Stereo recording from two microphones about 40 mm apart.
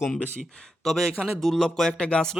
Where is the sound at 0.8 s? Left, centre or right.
Centre.